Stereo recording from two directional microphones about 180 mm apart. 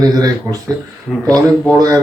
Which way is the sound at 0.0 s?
20° right (ahead or behind).